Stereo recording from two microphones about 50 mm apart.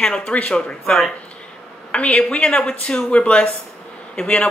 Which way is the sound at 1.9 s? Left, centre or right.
Left.